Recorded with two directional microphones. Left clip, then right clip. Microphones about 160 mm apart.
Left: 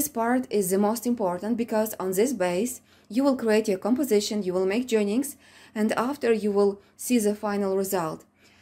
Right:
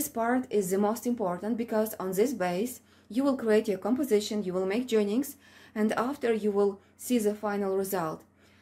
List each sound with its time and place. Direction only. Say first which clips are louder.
0.0 s speech: left 3 dB; 30° left (ahead or behind)